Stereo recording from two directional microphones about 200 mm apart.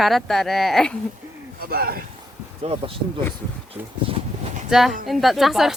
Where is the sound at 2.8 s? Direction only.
25° right (ahead or behind).